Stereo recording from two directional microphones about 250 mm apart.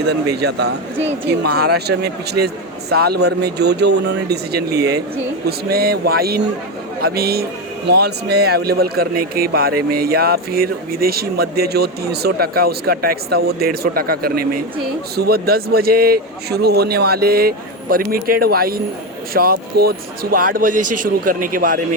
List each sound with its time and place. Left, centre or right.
0.1 s a man's voice: right